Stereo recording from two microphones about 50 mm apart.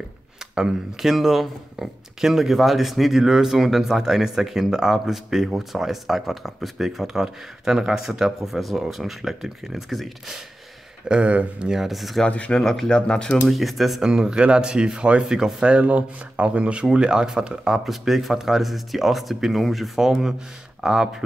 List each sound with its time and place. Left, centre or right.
0.6 s speech: centre
11.1 s speech: right
11.7 s speech: centre
12.3 s speech: left
12.5 s speech: centre
12.9 s speech: centre
13.5 s speech: centre
14.0 s speech: centre
17.8 s speech: centre